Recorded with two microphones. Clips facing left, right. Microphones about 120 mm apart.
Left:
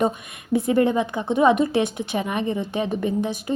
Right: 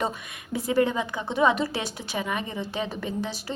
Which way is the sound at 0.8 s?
20° left (ahead or behind).